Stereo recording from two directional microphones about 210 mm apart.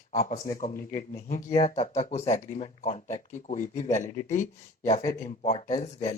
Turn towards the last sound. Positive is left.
turn(degrees=30)  # may be behind; listen again after turning